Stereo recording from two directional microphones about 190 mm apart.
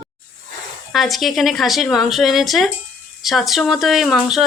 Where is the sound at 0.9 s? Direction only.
Centre (ahead or behind).